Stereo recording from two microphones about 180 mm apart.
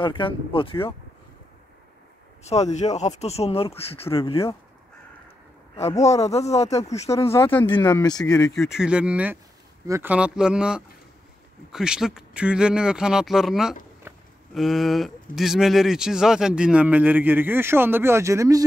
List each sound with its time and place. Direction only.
0.0 s speech: 25° left (ahead or behind)
2.4 s speech: 35° left (ahead or behind)
6.2 s speech: 35° left (ahead or behind)
7.1 s speech: 15° left (ahead or behind)
8.5 s speech: 5° right (ahead or behind)
14.1 s a sound: 15° right (ahead or behind)
14.5 s a man's voice: centre (ahead or behind); by 18.6 s 15° right (ahead or behind)